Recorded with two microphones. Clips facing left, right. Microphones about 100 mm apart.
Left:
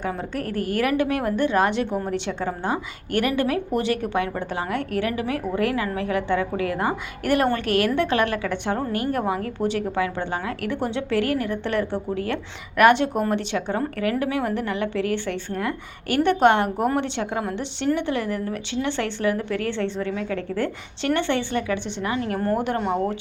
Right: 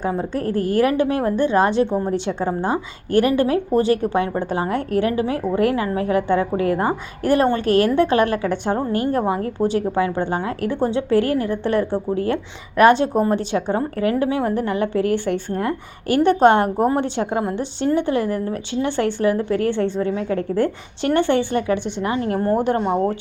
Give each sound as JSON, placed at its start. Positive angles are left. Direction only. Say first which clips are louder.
{"t": 0.3, "sound": "a woman's voice", "louder": "right 6 dB", "side_deg": -30}
{"t": 22.5, "sound": "a woman's voice", "louder": "right 6 dB", "side_deg": -40}
{"t": 22.8, "sound": "speech", "louder": "right 4 dB", "side_deg": -15}